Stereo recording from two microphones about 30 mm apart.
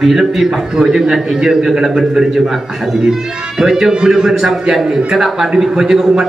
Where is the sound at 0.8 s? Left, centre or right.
Centre.